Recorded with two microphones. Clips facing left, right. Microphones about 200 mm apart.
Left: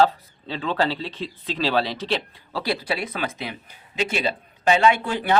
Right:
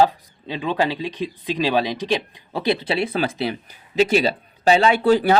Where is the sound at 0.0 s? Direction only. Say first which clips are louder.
Right 1 dB; 15° right (ahead or behind).